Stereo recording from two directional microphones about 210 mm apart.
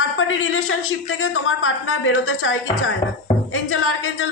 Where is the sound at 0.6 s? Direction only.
75° left (ahead or behind).